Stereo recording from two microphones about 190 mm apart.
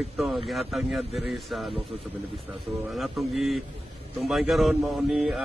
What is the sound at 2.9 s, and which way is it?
A man's voice, centre (ahead or behind).